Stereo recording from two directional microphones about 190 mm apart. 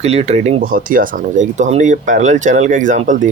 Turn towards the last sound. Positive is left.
turn(degrees=-40)  # may be behind; listen again after turning